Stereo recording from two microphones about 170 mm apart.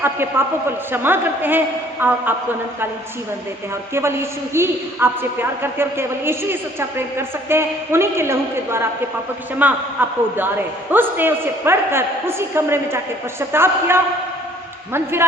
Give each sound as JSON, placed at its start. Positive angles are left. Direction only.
{"t": 0.0, "sound": "a man's voice", "side_deg": -15}
{"t": 3.9, "sound": "a woman's voice", "side_deg": -15}